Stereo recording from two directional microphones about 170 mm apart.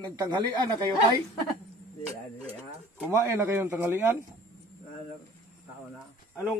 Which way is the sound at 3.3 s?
15° right (ahead or behind).